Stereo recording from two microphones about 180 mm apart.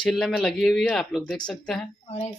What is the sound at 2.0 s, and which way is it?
Speech, 35° left (ahead or behind).